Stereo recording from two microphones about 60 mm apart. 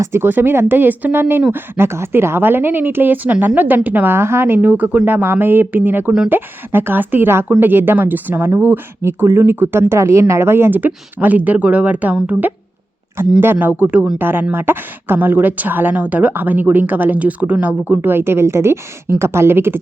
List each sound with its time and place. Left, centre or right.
0.0 s speech: right
10.8 s speech: right